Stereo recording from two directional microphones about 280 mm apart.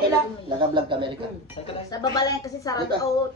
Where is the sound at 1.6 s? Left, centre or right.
Centre.